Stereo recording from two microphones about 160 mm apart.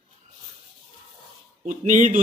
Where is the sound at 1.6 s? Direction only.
50° right (ahead or behind).